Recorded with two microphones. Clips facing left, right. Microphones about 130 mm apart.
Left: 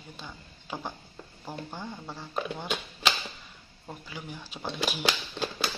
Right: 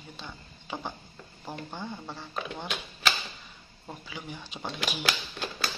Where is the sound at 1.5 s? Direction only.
5° left (ahead or behind).